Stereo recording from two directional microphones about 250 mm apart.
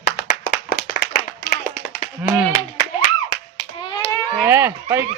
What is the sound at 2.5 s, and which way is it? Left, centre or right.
Hands, left.